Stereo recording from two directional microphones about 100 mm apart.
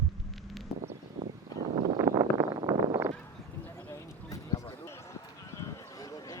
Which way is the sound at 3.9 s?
35° left (ahead or behind).